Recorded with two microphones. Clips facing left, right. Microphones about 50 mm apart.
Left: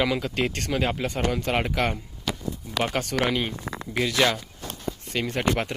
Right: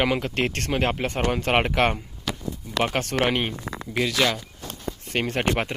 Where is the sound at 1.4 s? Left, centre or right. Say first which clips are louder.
Right 4 dB; right.